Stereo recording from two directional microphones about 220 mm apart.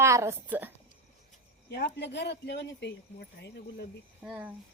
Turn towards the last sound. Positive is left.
turn(degrees=-5)  # may be behind; listen again after turning